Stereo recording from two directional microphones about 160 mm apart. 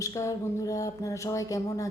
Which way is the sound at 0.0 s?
20° left (ahead or behind).